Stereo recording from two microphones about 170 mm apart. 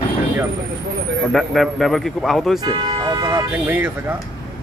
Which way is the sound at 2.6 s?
25° right (ahead or behind).